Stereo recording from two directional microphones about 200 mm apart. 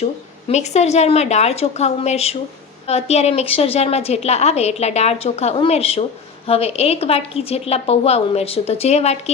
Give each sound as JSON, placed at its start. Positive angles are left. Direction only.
{"t": 0.0, "sound": "a woman's voice", "side_deg": 35}